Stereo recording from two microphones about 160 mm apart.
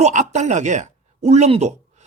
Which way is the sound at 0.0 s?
50° right (ahead or behind).